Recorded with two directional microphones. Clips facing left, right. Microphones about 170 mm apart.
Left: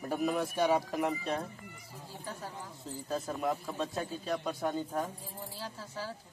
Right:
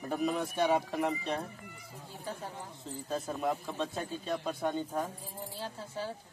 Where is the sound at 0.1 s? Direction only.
Centre (ahead or behind).